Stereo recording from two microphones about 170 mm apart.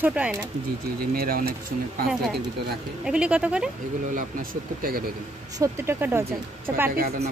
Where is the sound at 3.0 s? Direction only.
5° right (ahead or behind).